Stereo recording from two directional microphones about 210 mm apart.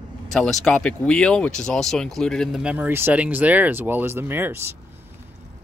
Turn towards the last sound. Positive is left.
turn(degrees=-10)  # may be behind; listen again after turning